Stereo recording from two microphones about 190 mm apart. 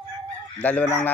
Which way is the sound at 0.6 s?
10° left (ahead or behind).